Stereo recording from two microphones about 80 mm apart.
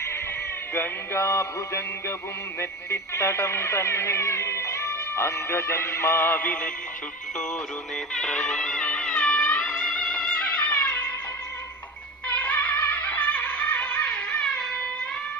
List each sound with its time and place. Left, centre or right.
0.7 s speech: left; by 6.7 s centre
7.3 s music: centre
12.4 s music: centre